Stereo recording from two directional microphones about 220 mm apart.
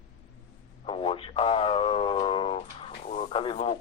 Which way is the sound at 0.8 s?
25° left (ahead or behind).